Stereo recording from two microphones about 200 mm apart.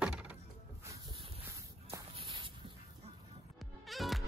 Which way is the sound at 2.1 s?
25° right (ahead or behind).